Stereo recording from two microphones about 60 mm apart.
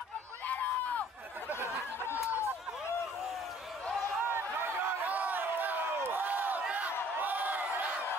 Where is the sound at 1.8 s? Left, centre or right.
Left.